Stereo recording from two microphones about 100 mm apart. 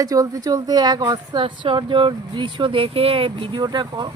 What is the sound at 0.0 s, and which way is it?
A woman's voice, 35° right (ahead or behind).